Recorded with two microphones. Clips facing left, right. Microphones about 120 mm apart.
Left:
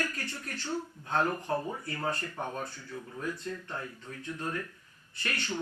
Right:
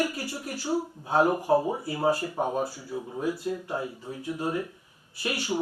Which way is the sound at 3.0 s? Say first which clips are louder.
Right 8 dB; 20° right (ahead or behind).